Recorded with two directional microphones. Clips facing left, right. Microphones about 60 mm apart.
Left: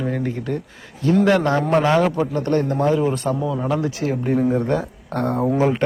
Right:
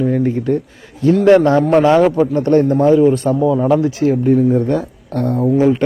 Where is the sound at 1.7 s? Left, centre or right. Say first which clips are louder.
Right 5 dB; right.